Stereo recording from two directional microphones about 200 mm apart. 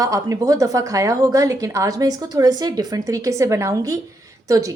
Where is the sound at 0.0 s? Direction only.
15° right (ahead or behind).